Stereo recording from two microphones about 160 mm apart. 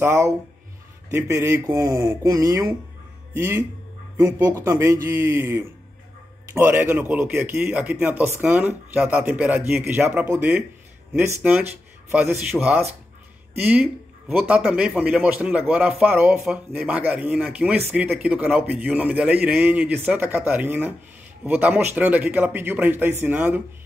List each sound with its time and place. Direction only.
0.0 s a man's voice: 15° right (ahead or behind)
14.4 s a man's voice: 5° right (ahead or behind)